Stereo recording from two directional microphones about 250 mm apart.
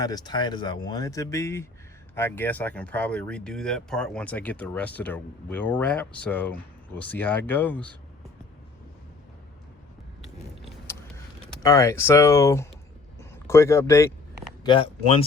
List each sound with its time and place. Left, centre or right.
0.0 s speech: centre
11.6 s speech: centre
13.1 s a sound: centre
14.6 s speech: centre